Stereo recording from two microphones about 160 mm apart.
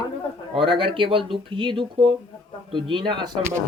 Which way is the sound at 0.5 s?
35° right (ahead or behind).